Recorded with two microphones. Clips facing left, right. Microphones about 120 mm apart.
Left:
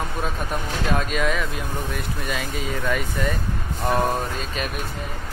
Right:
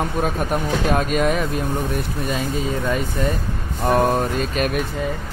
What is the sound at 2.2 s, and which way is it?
Speech, 30° right (ahead or behind).